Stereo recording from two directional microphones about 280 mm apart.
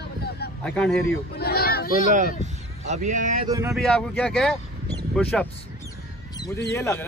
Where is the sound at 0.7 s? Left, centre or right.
Centre.